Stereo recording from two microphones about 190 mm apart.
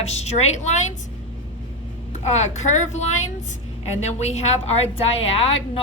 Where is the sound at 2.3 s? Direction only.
35° left (ahead or behind).